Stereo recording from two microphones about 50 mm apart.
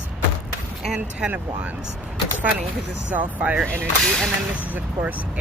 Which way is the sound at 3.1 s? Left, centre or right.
Right.